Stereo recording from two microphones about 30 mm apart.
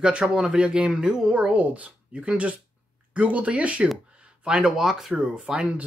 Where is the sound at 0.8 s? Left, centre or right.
Right.